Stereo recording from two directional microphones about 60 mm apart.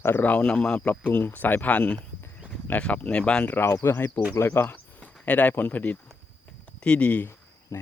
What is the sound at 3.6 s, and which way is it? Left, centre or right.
Speech, left.